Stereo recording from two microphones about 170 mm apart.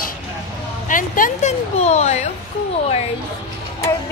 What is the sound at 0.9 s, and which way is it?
Speech, 50° left (ahead or behind).